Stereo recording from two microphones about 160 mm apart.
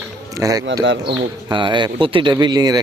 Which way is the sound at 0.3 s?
20° right (ahead or behind).